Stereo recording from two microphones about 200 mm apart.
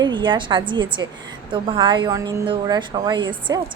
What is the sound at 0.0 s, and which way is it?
A woman's voice, 25° right (ahead or behind).